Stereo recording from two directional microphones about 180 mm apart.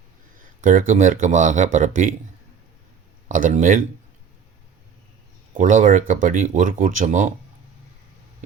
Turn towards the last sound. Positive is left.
turn(degrees=-45)  # may be behind; listen again after turning